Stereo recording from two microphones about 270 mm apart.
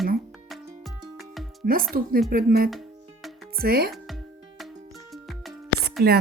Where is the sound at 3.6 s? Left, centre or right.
Right.